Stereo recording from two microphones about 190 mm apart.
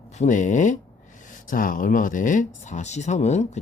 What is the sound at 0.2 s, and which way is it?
Speech, 40° left (ahead or behind).